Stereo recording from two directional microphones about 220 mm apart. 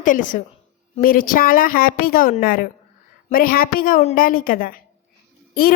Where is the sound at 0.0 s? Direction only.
35° left (ahead or behind).